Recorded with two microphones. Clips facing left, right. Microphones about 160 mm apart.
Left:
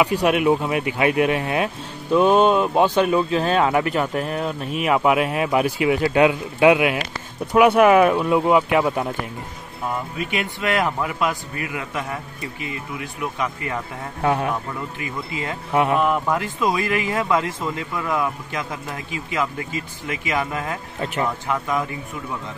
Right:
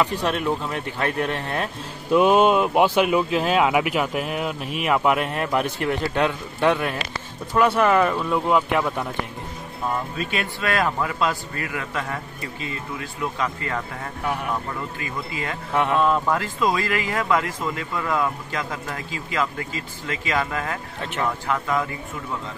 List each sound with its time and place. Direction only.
0.0 s a man's voice: 10° left (ahead or behind)
2.1 s a man's voice: 10° right (ahead or behind); by 9.0 s 5° left (ahead or behind)
10.1 s a man's voice: 15° left (ahead or behind)
15.0 s speech: 20° left (ahead or behind)
15.7 s speech: 10° left (ahead or behind)